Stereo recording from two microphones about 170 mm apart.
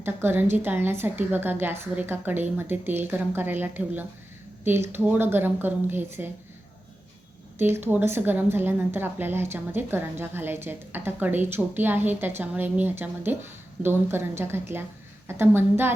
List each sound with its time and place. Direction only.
0.0 s a woman's voice: 15° right (ahead or behind)
7.6 s a woman's voice: 10° right (ahead or behind)